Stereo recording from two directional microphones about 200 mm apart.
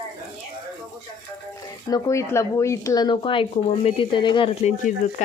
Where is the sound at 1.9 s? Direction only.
15° left (ahead or behind).